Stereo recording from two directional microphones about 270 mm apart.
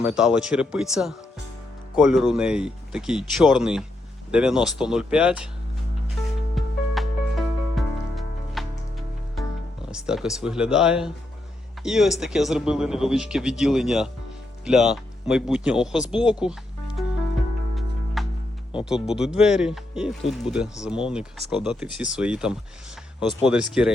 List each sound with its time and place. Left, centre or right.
0.0 s speech: centre
6.5 s music: centre
9.9 s speech: centre
17.7 s music: centre
18.9 s speech: centre